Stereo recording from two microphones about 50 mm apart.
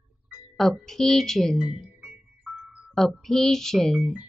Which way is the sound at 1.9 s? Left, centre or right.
Right.